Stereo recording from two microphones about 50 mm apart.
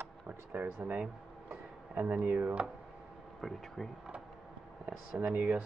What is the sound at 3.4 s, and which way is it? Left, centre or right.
Speech, centre.